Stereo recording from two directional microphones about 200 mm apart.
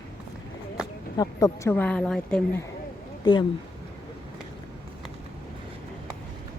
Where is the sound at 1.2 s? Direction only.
20° left (ahead or behind).